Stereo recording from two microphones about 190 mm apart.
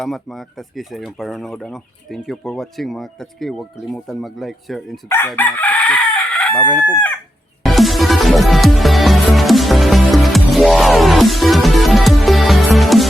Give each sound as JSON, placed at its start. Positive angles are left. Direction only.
{"t": 0.0, "sound": "speech", "side_deg": 0}
{"t": 5.0, "sound": "chicken", "side_deg": 10}
{"t": 6.6, "sound": "speech", "side_deg": 0}
{"t": 7.6, "sound": "music", "side_deg": 0}